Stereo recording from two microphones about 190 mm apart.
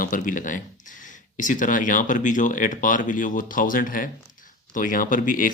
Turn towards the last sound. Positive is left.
turn(degrees=45)  # may be behind; listen again after turning